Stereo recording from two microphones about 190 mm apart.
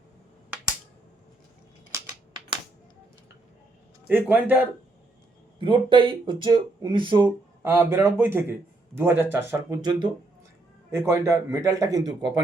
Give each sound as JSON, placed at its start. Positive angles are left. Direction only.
{"t": 1.9, "sound": "typewriter", "side_deg": -15}
{"t": 4.1, "sound": "a man's voice", "side_deg": -10}
{"t": 5.5, "sound": "speech", "side_deg": -25}
{"t": 7.6, "sound": "a man's voice", "side_deg": -10}